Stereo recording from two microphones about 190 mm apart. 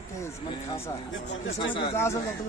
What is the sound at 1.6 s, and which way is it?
Speech, 25° left (ahead or behind).